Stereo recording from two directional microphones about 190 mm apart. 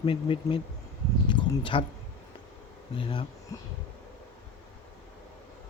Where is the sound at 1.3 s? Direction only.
25° left (ahead or behind).